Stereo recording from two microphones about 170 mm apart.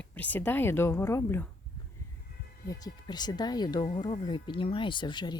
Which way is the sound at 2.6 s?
25° left (ahead or behind).